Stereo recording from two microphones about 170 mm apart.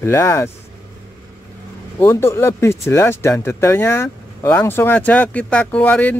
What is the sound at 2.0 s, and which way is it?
Speech, 15° left (ahead or behind).